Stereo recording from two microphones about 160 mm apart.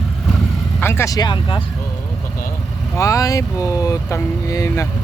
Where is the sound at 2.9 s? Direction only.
20° left (ahead or behind).